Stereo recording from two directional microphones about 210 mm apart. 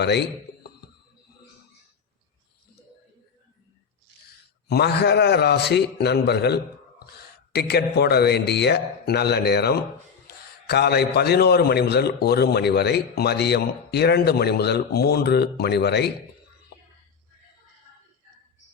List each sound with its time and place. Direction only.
0.0 s a man's voice: 50° left (ahead or behind)
4.7 s a man's voice: 50° left (ahead or behind)